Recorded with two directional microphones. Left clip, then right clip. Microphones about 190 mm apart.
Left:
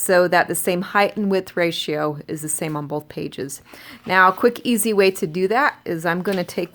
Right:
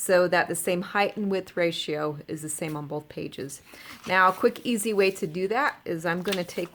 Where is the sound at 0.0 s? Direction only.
30° left (ahead or behind).